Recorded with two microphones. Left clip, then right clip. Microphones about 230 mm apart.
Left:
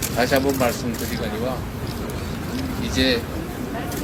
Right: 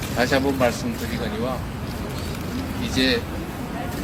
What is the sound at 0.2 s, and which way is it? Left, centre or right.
Speech, right.